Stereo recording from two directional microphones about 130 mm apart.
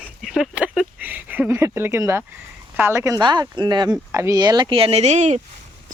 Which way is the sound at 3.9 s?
20° right (ahead or behind).